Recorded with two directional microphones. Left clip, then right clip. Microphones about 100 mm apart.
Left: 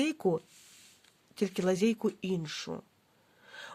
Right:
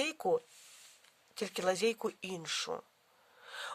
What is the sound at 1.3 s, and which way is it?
Speech, 25° right (ahead or behind).